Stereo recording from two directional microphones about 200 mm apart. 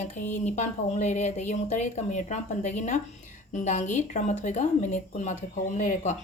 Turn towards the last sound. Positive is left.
turn(degrees=40)  # may be behind; listen again after turning